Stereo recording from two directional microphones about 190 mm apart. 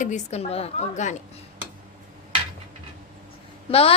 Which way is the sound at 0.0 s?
35° left (ahead or behind).